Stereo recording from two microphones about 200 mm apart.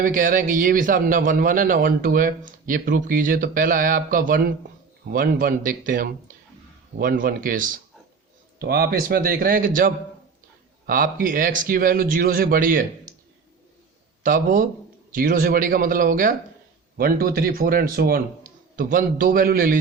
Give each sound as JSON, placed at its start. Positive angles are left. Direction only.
{"t": 0.0, "sound": "speech", "side_deg": -40}
{"t": 14.3, "sound": "speech", "side_deg": -45}